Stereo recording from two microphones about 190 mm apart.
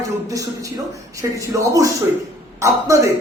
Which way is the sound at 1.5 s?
15° right (ahead or behind).